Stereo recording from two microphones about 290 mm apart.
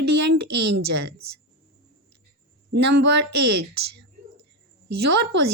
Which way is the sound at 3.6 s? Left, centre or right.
Right.